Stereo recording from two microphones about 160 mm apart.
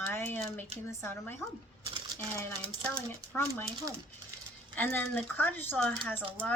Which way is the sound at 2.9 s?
10° left (ahead or behind).